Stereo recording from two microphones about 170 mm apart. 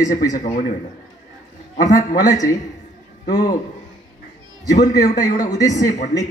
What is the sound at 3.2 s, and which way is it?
Speech, 65° left (ahead or behind).